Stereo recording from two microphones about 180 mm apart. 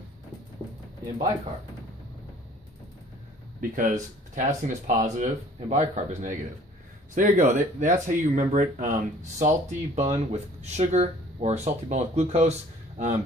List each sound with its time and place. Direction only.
3.7 s speech: 45° right (ahead or behind)